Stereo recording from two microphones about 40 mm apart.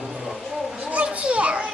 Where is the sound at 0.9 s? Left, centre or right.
Right.